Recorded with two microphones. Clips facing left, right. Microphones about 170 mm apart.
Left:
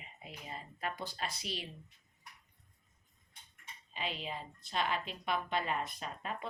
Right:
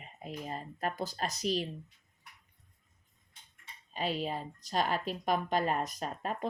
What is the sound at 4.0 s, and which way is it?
A woman's voice, 40° right (ahead or behind).